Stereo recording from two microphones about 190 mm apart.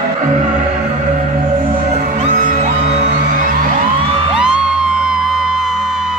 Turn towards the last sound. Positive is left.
turn(degrees=-5)  # may be behind; listen again after turning